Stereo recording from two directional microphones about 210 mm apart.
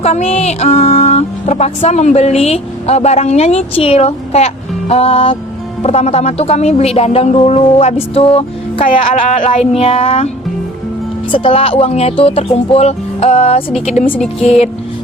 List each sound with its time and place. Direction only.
0.0 s speech: 30° left (ahead or behind)
11.3 s speech: 25° left (ahead or behind)